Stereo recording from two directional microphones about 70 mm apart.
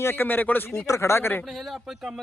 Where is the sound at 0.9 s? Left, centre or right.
Left.